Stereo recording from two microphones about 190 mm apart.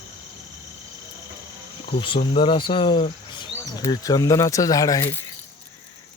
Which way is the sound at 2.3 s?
30° left (ahead or behind).